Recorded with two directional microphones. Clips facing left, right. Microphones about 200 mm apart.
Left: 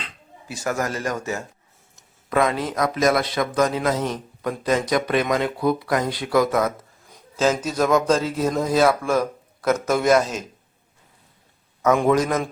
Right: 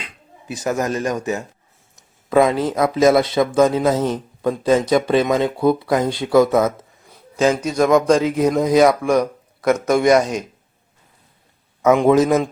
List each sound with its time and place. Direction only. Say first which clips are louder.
0.0 s speech: right 1 dB; 20° right (ahead or behind)
7.7 s a man's voice: right 6 dB; 10° right (ahead or behind)
11.8 s speech: right 5 dB; 25° right (ahead or behind)